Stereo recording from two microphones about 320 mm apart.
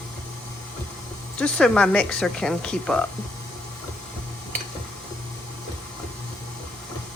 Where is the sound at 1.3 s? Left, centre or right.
Centre.